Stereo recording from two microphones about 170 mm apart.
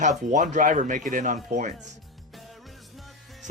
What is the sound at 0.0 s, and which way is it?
Speech, 45° right (ahead or behind).